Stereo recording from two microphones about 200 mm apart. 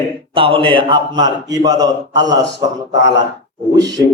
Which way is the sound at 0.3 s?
25° right (ahead or behind).